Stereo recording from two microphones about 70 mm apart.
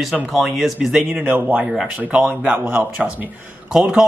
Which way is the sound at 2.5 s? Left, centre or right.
Right.